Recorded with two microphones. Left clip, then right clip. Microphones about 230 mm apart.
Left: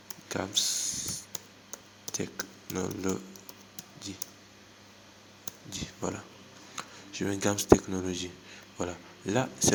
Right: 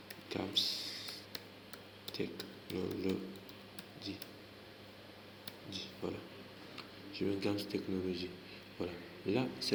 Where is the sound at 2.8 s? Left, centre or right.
Left.